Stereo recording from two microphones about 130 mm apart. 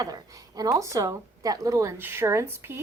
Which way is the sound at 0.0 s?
25° right (ahead or behind).